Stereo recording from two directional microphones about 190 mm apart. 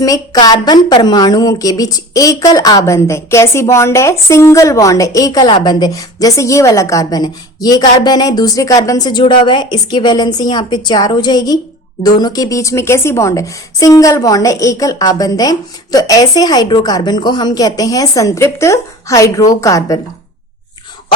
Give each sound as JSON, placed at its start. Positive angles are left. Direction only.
{"t": 0.0, "sound": "a woman's voice", "side_deg": 20}